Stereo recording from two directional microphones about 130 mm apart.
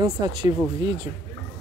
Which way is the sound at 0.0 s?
30° right (ahead or behind).